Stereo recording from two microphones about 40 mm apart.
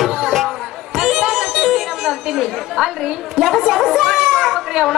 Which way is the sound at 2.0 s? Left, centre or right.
Centre.